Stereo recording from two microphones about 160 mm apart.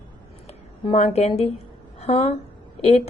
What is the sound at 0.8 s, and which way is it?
A woman's voice, 40° left (ahead or behind).